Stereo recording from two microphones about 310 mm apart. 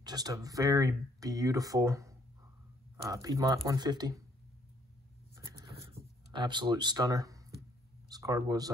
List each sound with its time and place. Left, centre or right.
0.0 s speech: centre
5.3 s writing: centre
8.1 s speech: centre